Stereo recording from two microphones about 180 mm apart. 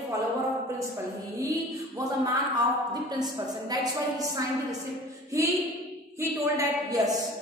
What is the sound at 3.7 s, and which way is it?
Speech, 20° right (ahead or behind).